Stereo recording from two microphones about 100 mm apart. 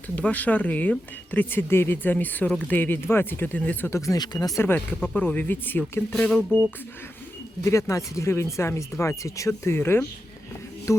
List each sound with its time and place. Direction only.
0.2 s speech: 15° left (ahead or behind); by 4.6 s 40° left (ahead or behind)
4.6 s speech: 20° left (ahead or behind)
7.6 s speech: 30° left (ahead or behind)